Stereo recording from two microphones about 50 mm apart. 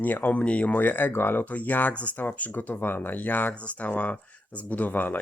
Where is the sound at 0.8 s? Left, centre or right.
Left.